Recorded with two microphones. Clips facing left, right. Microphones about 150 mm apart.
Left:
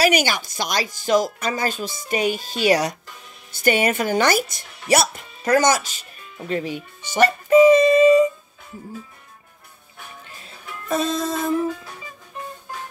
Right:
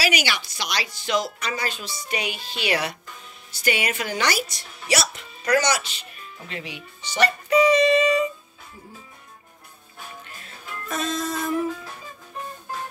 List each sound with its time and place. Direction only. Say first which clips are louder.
0.0 s speech: left 6 dB; 45° left (ahead or behind)
10.9 s music: left 6 dB; 30° left (ahead or behind)